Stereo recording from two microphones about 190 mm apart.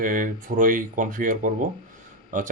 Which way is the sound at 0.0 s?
45° right (ahead or behind).